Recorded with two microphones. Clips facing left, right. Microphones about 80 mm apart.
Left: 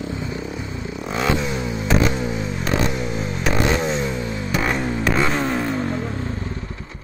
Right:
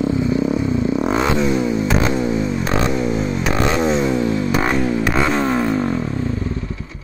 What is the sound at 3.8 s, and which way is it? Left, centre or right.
Vehicle, right.